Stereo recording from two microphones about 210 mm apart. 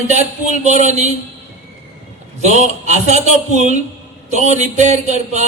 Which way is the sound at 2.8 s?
35° right (ahead or behind).